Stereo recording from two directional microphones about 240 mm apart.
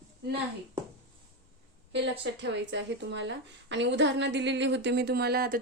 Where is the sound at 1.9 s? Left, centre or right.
Right.